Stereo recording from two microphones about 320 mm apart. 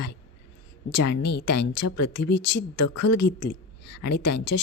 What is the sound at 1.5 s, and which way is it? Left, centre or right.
A woman's voice, left.